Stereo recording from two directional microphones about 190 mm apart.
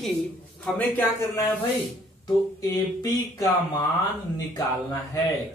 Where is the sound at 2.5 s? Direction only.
20° left (ahead or behind).